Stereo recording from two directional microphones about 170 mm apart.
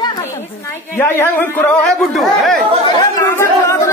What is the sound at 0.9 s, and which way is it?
A man's voice, 10° left (ahead or behind).